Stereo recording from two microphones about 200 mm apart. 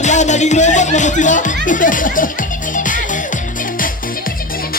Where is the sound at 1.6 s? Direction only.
40° left (ahead or behind).